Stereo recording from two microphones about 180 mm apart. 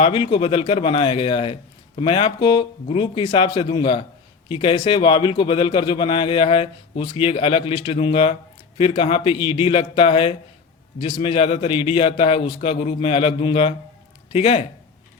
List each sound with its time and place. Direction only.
0.0 s a man's voice: 30° left (ahead or behind)